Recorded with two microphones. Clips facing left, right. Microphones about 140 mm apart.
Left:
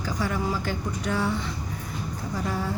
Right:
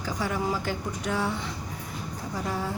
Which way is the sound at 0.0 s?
15° right (ahead or behind).